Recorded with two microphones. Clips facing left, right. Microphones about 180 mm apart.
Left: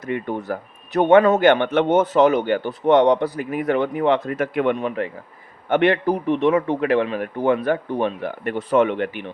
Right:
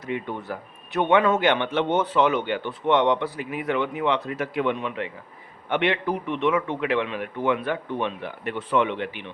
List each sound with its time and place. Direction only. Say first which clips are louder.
0.0 s a man's voice: left 4 dB; 45° left (ahead or behind)